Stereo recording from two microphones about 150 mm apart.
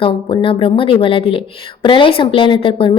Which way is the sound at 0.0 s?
35° left (ahead or behind).